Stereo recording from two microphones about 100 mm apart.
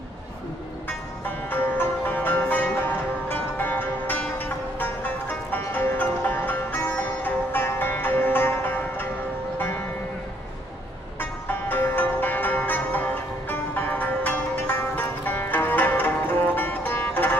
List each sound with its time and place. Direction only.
0.8 s music: 20° left (ahead or behind)
11.1 s music: 20° left (ahead or behind)